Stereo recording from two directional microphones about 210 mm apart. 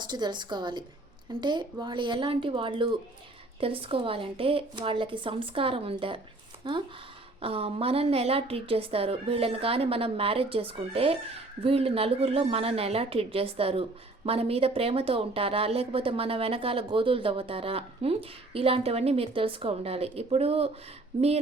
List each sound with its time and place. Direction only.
0.1 s speech: 20° right (ahead or behind)